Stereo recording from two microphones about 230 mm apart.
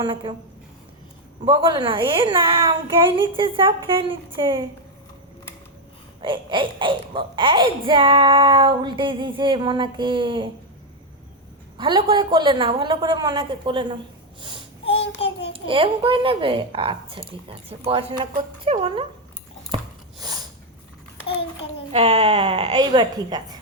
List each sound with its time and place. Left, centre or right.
0.0 s a child's voice: right
1.5 s a child's voice: right
6.2 s a child's voice: right
11.8 s a child's voice: right
14.8 s child singing: left
15.5 s a child's voice: right
19.7 s a sound: centre
21.2 s a child's voice: left
21.9 s a child's voice: right